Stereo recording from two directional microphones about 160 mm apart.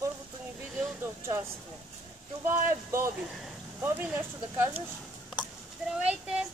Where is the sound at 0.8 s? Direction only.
15° right (ahead or behind).